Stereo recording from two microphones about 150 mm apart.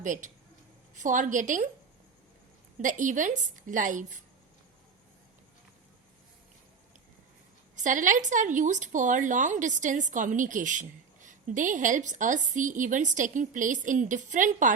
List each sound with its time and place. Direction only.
0.0 s speech: 60° right (ahead or behind)
2.8 s speech: 60° right (ahead or behind)
7.9 s speech: 60° right (ahead or behind)